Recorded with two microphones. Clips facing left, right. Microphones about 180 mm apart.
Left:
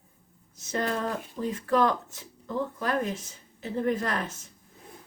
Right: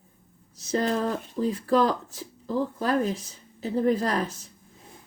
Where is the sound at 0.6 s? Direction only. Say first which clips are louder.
Right 4 dB; 35° right (ahead or behind).